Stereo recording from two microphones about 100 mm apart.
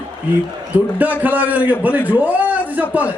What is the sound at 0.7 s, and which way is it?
A man's voice, 15° right (ahead or behind).